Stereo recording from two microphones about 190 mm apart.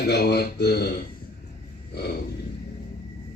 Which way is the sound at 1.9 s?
60° left (ahead or behind).